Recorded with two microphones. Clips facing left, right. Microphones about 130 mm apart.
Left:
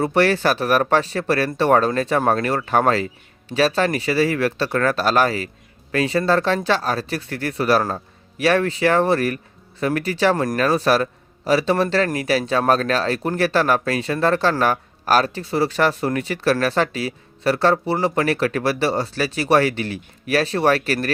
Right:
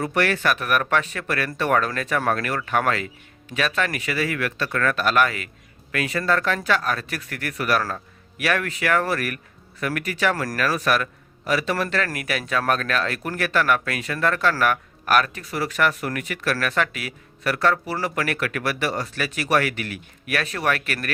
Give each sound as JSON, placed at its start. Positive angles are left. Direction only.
{"t": 0.0, "sound": "speech", "side_deg": 30}